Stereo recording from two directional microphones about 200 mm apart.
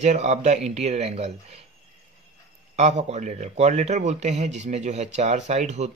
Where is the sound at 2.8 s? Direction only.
35° right (ahead or behind).